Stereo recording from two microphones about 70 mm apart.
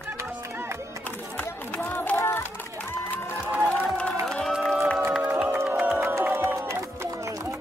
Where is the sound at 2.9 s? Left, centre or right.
Left.